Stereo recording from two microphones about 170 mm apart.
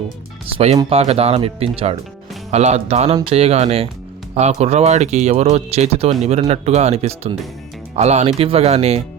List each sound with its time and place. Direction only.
0.9 s speech: 35° right (ahead or behind)